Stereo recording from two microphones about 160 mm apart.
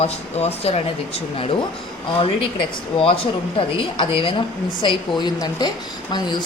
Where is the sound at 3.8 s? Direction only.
35° left (ahead or behind).